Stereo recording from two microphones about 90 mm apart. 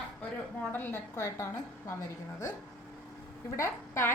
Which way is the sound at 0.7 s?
25° left (ahead or behind).